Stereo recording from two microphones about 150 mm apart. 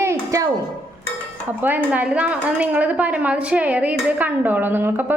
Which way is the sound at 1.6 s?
10° right (ahead or behind).